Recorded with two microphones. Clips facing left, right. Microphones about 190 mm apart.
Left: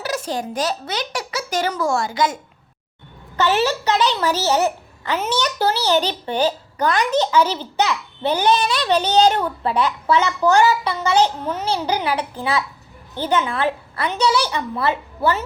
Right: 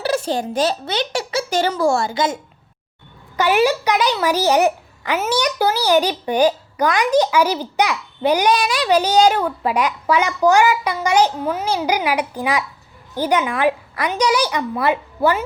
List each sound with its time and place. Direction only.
0.0 s speech: 30° right (ahead or behind)
3.3 s a child's voice: 10° right (ahead or behind)